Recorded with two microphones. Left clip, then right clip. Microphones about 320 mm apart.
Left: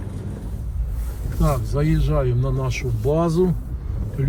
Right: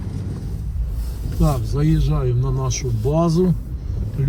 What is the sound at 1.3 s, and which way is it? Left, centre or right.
Speech, centre.